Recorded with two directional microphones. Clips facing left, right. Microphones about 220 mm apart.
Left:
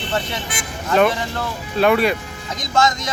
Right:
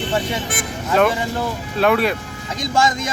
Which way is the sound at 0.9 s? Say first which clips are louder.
Even; centre (ahead or behind).